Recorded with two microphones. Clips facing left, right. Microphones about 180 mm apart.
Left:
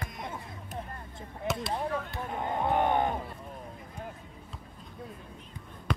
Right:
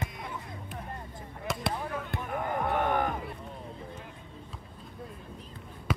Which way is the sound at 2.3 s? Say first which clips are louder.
Left 1 dB; 25° left (ahead or behind).